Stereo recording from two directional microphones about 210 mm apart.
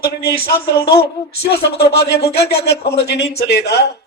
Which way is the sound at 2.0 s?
50° left (ahead or behind).